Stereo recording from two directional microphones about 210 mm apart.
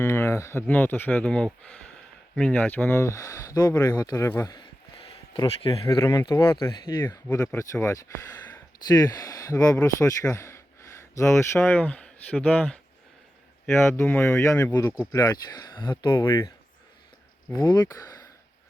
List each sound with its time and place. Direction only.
0.0 s speech: 10° left (ahead or behind)
17.5 s speech: 20° left (ahead or behind)